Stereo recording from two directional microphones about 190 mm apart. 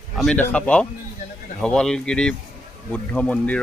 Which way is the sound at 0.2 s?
5° left (ahead or behind).